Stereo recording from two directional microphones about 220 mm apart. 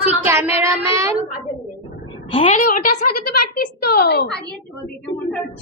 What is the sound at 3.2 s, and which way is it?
A woman's voice, 45° left (ahead or behind).